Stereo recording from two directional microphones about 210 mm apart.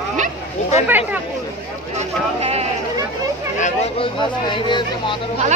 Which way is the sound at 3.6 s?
25° left (ahead or behind).